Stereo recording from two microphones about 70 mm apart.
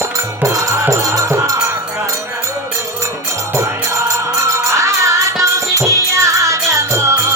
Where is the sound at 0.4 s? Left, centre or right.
Right.